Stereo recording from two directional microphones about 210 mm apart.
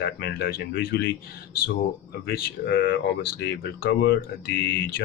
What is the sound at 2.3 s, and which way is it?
Speech, 50° left (ahead or behind).